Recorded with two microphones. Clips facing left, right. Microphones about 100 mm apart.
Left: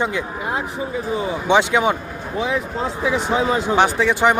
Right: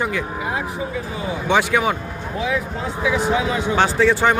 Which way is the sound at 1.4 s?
20° left (ahead or behind).